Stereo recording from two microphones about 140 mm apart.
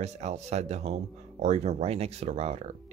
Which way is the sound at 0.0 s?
55° right (ahead or behind).